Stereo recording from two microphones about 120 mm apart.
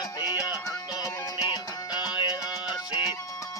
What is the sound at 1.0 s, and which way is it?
Music, 35° left (ahead or behind).